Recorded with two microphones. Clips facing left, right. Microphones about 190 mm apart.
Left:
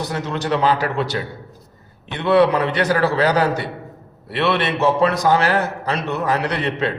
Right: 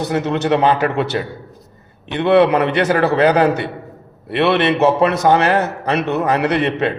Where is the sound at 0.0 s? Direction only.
60° right (ahead or behind).